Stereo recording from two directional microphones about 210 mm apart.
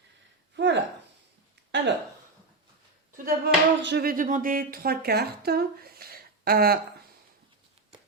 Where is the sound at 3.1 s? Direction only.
45° right (ahead or behind).